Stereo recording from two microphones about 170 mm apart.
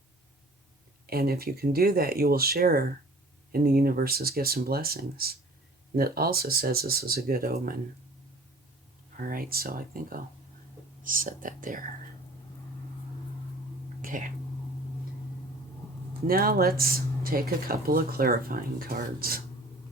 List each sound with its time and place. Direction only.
1.0 s speech: 65° right (ahead or behind)
9.1 s speech: 60° right (ahead or behind)
14.0 s speech: 50° right (ahead or behind)
16.2 s speech: 60° right (ahead or behind)